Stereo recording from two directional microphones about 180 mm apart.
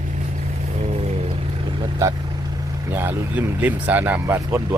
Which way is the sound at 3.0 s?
10° right (ahead or behind).